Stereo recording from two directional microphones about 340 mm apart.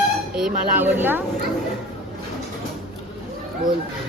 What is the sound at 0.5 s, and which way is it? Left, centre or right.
Speech, right.